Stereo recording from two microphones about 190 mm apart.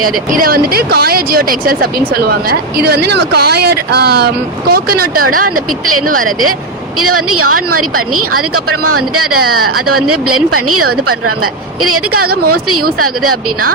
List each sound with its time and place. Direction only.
0.3 s speech: 50° right (ahead or behind)
12.4 s speech: 50° right (ahead or behind)